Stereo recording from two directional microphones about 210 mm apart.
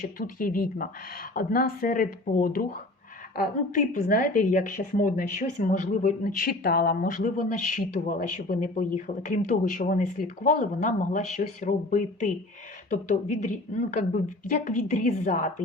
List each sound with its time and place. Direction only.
0.0 s speech: 40° left (ahead or behind)